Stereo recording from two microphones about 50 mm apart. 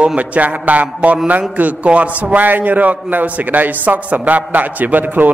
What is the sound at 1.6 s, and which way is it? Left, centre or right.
A man's voice, right.